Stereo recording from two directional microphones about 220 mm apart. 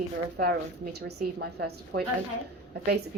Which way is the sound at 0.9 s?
45° right (ahead or behind).